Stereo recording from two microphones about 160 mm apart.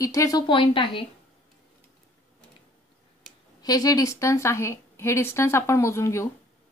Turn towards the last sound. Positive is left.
turn(degrees=20)  # may be behind; listen again after turning